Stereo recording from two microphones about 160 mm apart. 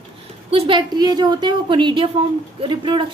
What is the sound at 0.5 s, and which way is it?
A woman's voice, 35° right (ahead or behind).